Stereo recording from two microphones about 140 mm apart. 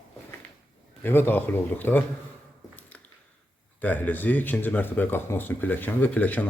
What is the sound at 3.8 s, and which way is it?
Speech, 10° left (ahead or behind).